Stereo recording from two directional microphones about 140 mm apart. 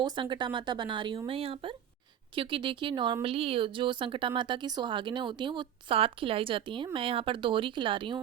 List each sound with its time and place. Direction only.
0.0 s speech: 35° right (ahead or behind)